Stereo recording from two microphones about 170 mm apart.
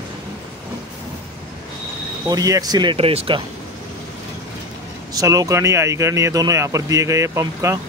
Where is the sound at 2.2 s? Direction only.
20° right (ahead or behind).